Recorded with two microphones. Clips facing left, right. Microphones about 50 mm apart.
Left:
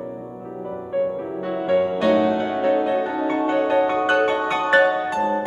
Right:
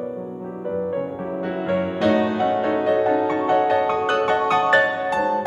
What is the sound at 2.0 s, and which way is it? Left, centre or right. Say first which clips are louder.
Music: left 1 dB; centre.